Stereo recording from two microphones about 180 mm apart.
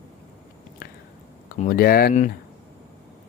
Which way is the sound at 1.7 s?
55° left (ahead or behind).